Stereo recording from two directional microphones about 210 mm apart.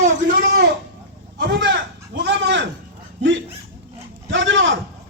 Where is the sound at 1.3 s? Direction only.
60° right (ahead or behind).